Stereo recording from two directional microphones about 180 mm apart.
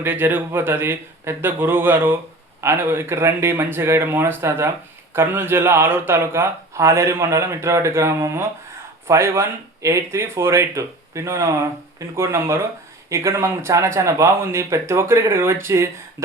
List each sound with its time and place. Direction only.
0.0 s speech: 10° right (ahead or behind)